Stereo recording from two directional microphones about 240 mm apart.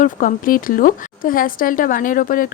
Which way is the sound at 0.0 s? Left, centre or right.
Left.